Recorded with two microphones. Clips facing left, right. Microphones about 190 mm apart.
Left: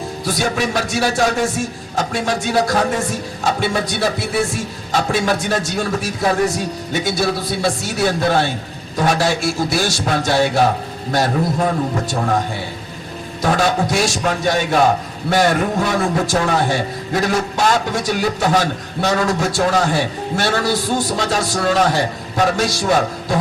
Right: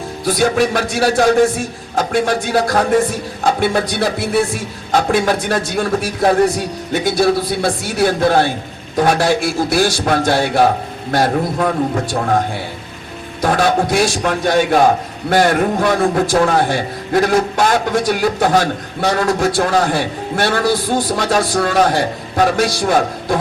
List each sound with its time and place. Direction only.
0.3 s a man's voice: 55° right (ahead or behind)
13.4 s a man's voice: 55° right (ahead or behind)